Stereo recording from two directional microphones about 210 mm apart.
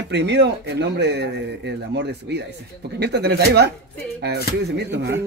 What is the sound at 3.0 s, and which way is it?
Speech, 50° right (ahead or behind).